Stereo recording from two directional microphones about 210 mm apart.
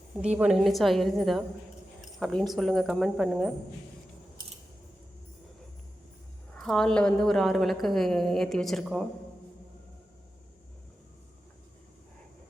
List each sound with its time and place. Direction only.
0.2 s a woman's voice: 5° right (ahead or behind)
2.0 s keys jangling: centre (ahead or behind)
2.5 s a woman's voice: centre (ahead or behind)
6.6 s a woman's voice: centre (ahead or behind)